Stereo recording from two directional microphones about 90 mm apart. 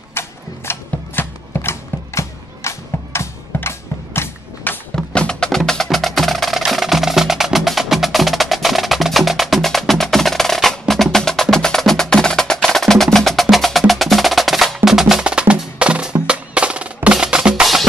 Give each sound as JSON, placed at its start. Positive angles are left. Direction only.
{"t": 0.1, "sound": "a sound", "side_deg": 25}
{"t": 4.9, "sound": "music", "side_deg": 10}
{"t": 5.6, "sound": "wood block", "side_deg": 0}
{"t": 14.9, "sound": "music", "side_deg": -5}